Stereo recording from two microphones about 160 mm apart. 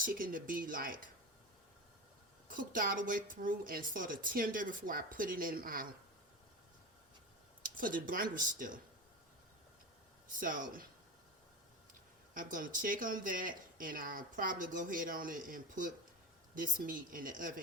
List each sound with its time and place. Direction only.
0.0 s speech: 60° right (ahead or behind)
2.5 s speech: 60° right (ahead or behind)
7.6 s speech: 60° right (ahead or behind)
10.4 s speech: 60° right (ahead or behind)
12.3 s speech: 60° right (ahead or behind)